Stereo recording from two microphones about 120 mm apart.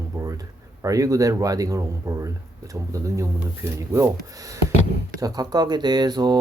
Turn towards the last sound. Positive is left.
turn(degrees=-35)  # may be behind; listen again after turning